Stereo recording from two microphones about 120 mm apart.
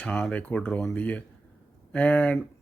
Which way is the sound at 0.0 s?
10° left (ahead or behind).